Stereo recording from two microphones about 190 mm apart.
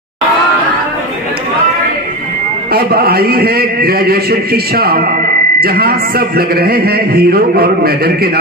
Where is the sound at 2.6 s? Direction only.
55° right (ahead or behind).